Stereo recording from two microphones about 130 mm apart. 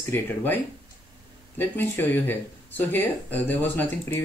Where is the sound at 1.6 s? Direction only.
15° left (ahead or behind).